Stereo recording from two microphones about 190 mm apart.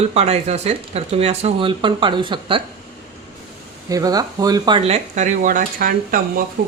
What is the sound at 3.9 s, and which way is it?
Speech, 20° right (ahead or behind).